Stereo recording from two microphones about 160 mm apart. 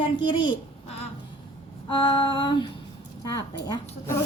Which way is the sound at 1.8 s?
30° left (ahead or behind).